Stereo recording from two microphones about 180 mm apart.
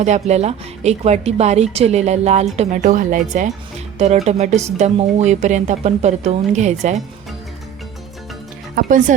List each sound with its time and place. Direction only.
0.0 s a woman's voice: 40° right (ahead or behind)
8.7 s speech: 45° right (ahead or behind)